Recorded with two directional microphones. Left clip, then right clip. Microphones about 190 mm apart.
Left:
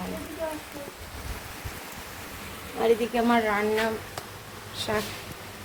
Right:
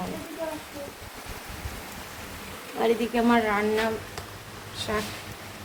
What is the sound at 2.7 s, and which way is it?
A woman's voice, centre (ahead or behind).